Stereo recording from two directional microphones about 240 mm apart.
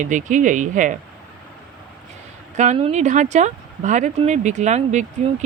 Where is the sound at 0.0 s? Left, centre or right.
Right.